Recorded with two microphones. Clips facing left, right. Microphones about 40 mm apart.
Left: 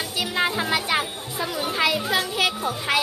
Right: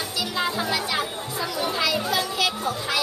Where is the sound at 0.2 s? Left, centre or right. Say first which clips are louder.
Left 3 dB; left.